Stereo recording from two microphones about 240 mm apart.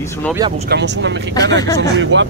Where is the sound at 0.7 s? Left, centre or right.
Right.